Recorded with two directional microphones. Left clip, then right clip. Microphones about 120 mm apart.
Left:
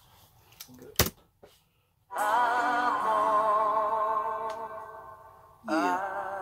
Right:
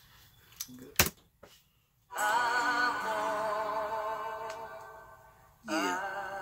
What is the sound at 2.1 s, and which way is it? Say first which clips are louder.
Music: left 3 dB; 25° right (ahead or behind).